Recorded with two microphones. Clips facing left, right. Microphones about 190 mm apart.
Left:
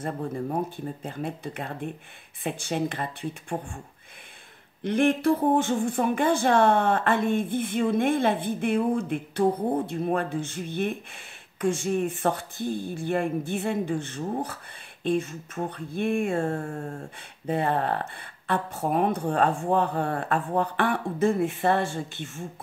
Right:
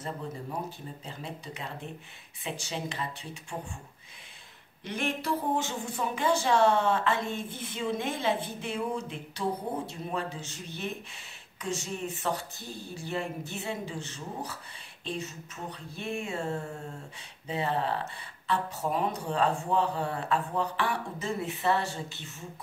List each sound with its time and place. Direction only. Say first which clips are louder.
0.0 s speech: left 7 dB; 55° left (ahead or behind)
4.8 s speech: left 10 dB; 55° left (ahead or behind)